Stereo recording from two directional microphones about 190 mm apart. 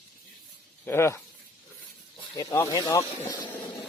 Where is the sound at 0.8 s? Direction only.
15° left (ahead or behind).